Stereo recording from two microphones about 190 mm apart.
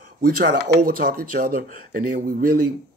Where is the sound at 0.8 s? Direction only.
50° right (ahead or behind).